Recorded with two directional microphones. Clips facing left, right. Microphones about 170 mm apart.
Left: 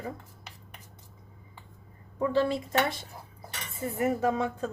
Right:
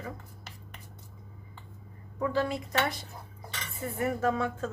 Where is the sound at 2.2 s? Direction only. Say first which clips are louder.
Left 3 dB; 25° left (ahead or behind).